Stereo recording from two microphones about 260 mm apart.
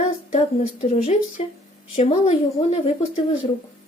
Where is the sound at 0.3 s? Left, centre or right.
Left.